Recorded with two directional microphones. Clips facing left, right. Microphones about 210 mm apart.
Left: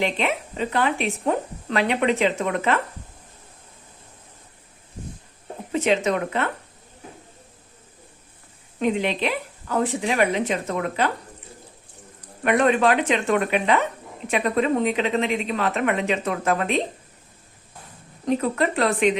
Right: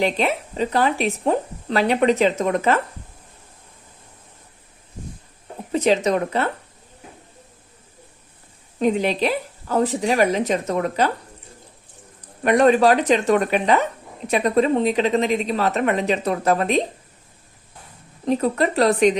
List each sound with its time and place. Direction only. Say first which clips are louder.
0.0 s a woman's voice: right 3 dB; 35° right (ahead or behind)
5.7 s a woman's voice: right 3 dB; 35° right (ahead or behind)
8.8 s a woman's voice: right 3 dB; 40° right (ahead or behind)
12.4 s a woman's voice: right 4 dB; 35° right (ahead or behind)
18.3 s a woman's voice: right 2 dB; 35° right (ahead or behind)